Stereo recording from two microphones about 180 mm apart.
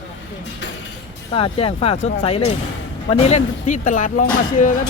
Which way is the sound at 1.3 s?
30° left (ahead or behind).